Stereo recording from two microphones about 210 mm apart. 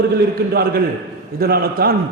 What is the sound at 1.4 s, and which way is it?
Speech, 45° right (ahead or behind).